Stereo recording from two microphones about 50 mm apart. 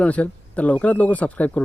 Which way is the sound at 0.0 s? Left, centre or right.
Left.